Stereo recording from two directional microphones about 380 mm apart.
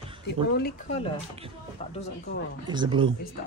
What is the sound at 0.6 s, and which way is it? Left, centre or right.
Speech, left.